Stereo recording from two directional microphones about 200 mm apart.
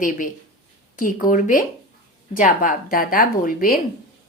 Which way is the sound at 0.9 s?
40° left (ahead or behind).